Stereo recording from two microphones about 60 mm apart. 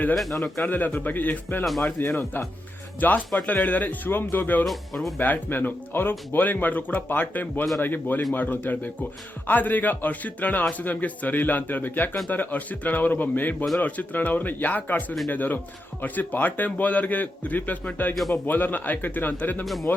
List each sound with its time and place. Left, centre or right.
0.6 s a man's voice: left
4.6 s speech: centre
5.2 s a man's voice: left
18.1 s speech: centre
18.4 s a man's voice: left
19.6 s speech: centre